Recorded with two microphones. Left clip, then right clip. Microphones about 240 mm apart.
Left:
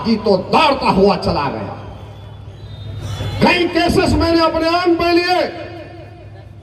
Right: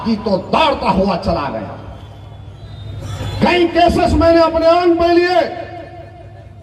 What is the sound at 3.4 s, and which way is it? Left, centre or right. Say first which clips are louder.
A man's voice: right 2 dB; left.